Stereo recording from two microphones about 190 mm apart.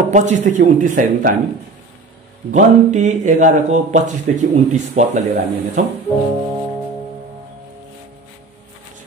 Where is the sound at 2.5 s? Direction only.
40° right (ahead or behind).